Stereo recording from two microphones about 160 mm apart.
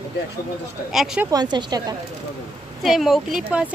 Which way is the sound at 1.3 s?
25° right (ahead or behind).